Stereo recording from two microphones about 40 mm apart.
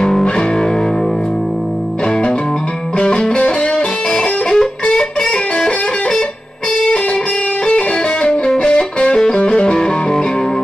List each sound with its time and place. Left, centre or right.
0.0 s music: centre
3.0 s music: left
7.6 s music: left